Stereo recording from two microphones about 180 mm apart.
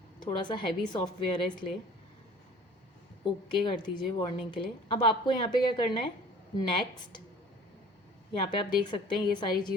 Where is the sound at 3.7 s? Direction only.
25° left (ahead or behind).